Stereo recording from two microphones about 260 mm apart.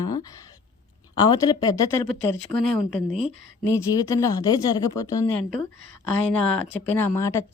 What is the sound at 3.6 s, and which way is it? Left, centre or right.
A woman's voice, centre.